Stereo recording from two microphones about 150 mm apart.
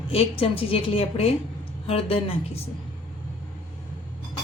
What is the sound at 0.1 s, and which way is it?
A woman's voice, 40° left (ahead or behind).